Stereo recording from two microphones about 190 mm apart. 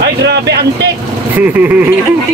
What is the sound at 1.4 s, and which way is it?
Speech, 10° right (ahead or behind).